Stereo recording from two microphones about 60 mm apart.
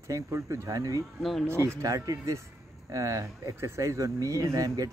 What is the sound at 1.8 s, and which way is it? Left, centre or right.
Speech, right.